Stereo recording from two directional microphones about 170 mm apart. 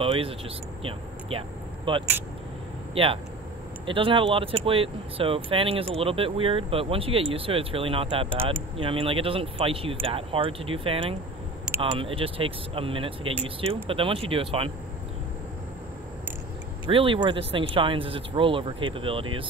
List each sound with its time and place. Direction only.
0.0 s speech: 35° right (ahead or behind)
1.3 s speech: 35° right (ahead or behind)
16.8 s speech: 30° right (ahead or behind)